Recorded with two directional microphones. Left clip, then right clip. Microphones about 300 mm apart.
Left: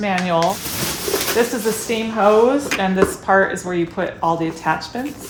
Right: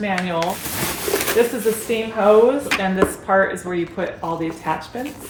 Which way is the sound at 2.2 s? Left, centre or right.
Centre.